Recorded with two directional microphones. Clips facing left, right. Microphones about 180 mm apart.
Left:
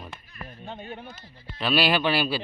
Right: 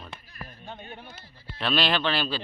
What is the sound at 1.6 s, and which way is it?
Speech, 5° left (ahead or behind).